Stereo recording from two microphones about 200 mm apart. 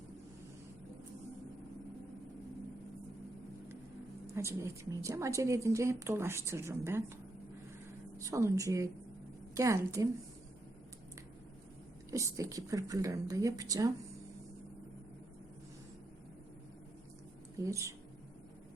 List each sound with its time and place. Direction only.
4.4 s a woman's voice: 15° right (ahead or behind)
8.2 s a woman's voice: 15° right (ahead or behind)
12.1 s a woman's voice: 15° right (ahead or behind)
17.6 s a woman's voice: 15° right (ahead or behind)